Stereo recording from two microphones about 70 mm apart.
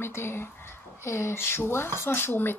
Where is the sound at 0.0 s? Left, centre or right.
Left.